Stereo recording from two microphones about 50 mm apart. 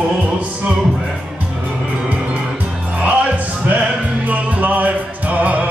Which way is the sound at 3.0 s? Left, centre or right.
Right.